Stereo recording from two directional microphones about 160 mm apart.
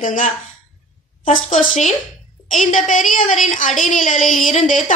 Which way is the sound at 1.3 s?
50° left (ahead or behind).